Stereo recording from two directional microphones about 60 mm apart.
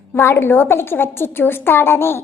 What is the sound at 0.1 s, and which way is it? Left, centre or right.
A woman's voice, left.